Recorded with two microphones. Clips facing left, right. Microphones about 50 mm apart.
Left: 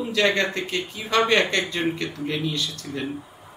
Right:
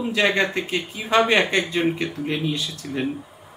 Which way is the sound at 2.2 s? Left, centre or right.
Centre.